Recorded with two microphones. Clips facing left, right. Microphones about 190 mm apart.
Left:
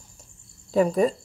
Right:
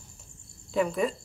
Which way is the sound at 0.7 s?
40° left (ahead or behind).